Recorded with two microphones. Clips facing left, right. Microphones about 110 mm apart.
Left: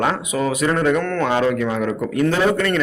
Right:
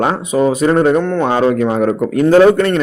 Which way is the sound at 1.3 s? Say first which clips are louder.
Right 5 dB; 45° right (ahead or behind).